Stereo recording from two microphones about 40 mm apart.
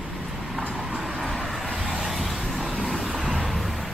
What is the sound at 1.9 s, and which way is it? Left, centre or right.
Vehicle, centre.